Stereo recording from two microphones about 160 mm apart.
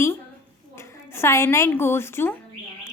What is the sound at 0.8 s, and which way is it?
A woman's voice, 15° left (ahead or behind).